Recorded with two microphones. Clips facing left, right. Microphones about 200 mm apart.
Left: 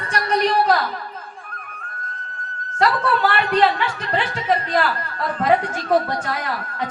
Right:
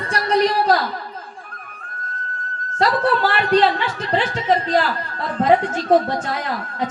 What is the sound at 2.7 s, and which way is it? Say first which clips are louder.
Speech: right 1 dB; 25° right (ahead or behind).